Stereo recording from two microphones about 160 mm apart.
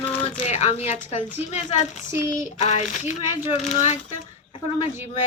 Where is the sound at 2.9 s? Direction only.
45° left (ahead or behind).